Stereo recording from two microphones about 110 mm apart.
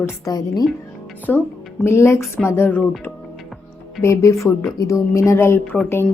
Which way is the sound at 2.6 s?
15° left (ahead or behind).